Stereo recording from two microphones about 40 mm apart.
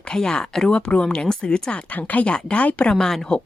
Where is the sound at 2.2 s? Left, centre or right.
Left.